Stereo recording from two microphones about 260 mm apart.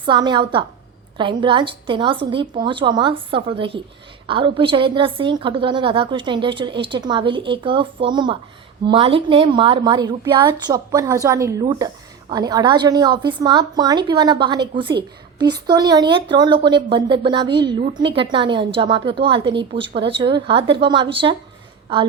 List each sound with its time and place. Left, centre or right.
0.0 s a woman's voice: centre